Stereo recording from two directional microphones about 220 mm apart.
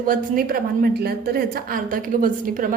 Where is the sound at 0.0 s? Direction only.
40° right (ahead or behind).